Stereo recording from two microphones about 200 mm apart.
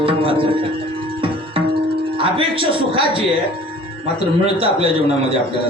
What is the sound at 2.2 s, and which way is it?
Speech, 25° right (ahead or behind).